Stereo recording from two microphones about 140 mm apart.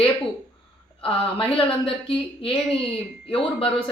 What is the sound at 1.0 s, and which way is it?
A woman's voice, 40° left (ahead or behind).